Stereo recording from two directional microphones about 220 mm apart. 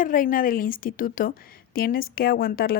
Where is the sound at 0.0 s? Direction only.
40° left (ahead or behind).